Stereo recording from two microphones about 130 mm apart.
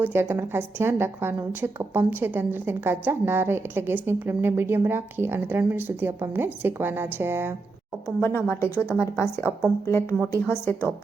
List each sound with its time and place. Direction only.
0.0 s a woman's voice: 15° right (ahead or behind)
8.2 s a woman's voice: 20° left (ahead or behind)